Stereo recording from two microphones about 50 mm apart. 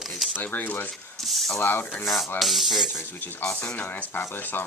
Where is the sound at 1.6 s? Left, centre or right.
Left.